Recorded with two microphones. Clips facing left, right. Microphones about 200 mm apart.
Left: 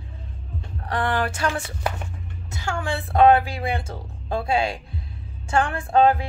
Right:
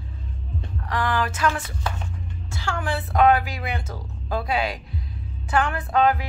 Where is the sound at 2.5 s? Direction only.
20° left (ahead or behind).